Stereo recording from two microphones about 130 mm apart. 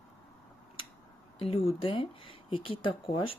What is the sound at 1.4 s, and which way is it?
Speech, 50° left (ahead or behind).